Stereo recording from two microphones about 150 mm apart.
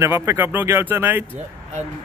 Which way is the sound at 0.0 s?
15° right (ahead or behind).